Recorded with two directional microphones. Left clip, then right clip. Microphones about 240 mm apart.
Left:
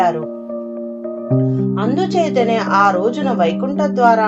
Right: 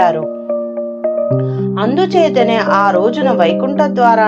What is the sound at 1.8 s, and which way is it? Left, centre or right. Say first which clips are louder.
A woman's voice: right 6 dB; right.